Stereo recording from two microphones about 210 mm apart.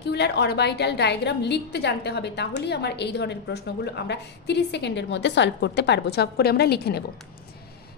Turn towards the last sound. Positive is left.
turn(degrees=50)  # may be behind; listen again after turning